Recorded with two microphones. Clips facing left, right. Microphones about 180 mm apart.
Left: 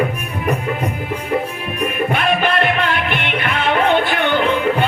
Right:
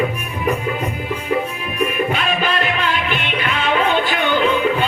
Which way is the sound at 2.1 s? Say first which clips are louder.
Left 3 dB; 60° left (ahead or behind).